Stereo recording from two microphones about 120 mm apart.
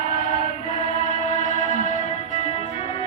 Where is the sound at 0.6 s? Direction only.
85° left.